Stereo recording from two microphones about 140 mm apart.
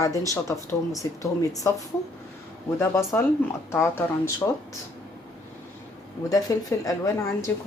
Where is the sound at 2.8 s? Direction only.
15° left (ahead or behind).